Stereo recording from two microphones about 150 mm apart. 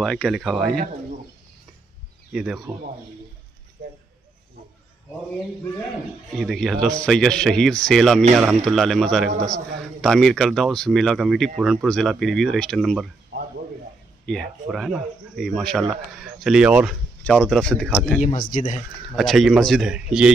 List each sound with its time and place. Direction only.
0.0 s speech: 5° left (ahead or behind)
2.3 s speech: centre (ahead or behind)
6.3 s speech: centre (ahead or behind)
13.3 s a sound: 90° right
14.2 s speech: 5° left (ahead or behind)
17.2 s speech: 5° left (ahead or behind)
18.2 s speech: 60° left (ahead or behind)
19.1 s speech: centre (ahead or behind)